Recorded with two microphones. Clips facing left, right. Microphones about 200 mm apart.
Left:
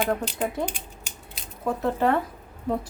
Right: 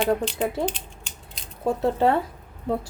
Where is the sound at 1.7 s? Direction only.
30° right (ahead or behind).